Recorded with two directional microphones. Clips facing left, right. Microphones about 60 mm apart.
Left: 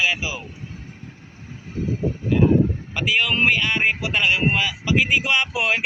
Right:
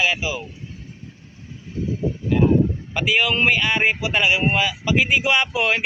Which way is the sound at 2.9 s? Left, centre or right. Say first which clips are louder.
Right 1 dB; centre.